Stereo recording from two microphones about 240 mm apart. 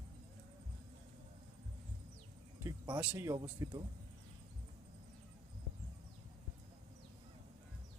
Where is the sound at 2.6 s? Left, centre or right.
Centre.